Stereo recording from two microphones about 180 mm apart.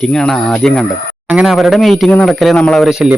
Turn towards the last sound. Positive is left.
turn(degrees=0)  # may be behind; listen again after turning